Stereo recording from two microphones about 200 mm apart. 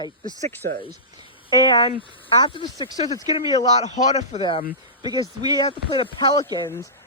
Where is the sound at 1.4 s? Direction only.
25° left (ahead or behind).